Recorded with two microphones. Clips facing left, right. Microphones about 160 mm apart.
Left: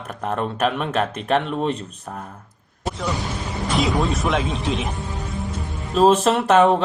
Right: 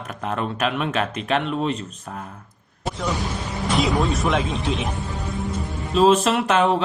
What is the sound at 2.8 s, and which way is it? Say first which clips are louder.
Speech: even; centre (ahead or behind).